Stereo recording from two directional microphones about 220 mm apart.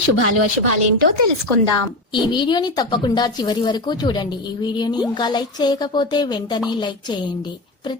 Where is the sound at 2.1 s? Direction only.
20° left (ahead or behind).